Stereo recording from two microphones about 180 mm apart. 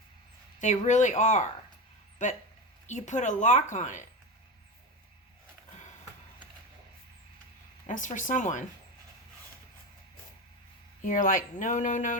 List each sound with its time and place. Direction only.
0.6 s a woman's voice: 40° left (ahead or behind)
7.9 s a woman's voice: 45° left (ahead or behind)
11.0 s a woman's voice: 50° left (ahead or behind)